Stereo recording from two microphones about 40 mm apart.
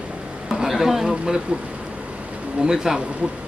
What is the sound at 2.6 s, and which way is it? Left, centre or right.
Speech, centre.